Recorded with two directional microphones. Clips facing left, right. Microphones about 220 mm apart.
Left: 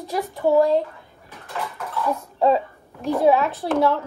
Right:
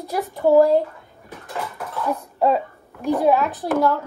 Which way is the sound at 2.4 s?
5° right (ahead or behind).